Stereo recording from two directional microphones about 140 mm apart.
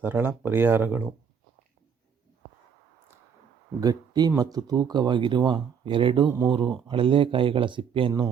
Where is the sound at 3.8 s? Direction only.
25° right (ahead or behind).